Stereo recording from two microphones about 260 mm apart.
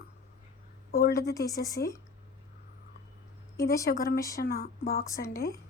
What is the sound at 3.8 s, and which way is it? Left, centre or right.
Speech, left.